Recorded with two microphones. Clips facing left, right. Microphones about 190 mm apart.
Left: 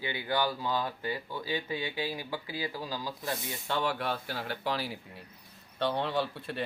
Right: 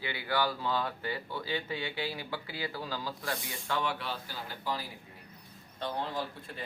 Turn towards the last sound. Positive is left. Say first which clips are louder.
# left 6 dB
turn(degrees=70)  # may be behind; listen again after turning